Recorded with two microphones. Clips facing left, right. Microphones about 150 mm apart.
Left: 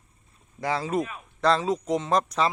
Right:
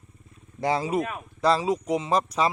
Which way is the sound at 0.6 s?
20° right (ahead or behind).